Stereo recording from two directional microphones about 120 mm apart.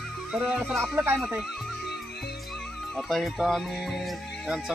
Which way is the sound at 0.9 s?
20° right (ahead or behind).